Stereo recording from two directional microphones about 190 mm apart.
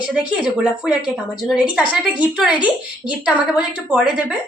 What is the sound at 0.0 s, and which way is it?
A woman's voice, 5° right (ahead or behind).